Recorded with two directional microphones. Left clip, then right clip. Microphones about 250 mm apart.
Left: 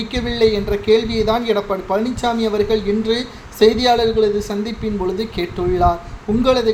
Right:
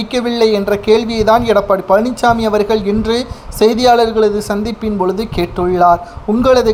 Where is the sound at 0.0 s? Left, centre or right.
Right.